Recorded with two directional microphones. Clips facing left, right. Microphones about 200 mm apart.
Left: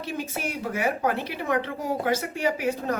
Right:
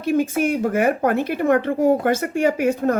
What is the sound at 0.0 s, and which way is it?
Speech, 50° right (ahead or behind).